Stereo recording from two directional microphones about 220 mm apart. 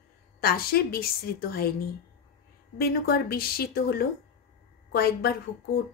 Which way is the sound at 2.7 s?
45° left (ahead or behind).